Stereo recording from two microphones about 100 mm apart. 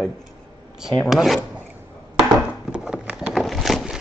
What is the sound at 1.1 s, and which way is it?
Speech, 5° right (ahead or behind).